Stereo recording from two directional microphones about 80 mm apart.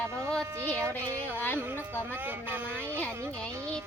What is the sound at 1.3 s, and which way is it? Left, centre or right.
Music, left.